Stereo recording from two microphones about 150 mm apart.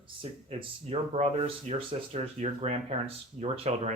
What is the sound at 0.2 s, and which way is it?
Speech, 40° right (ahead or behind).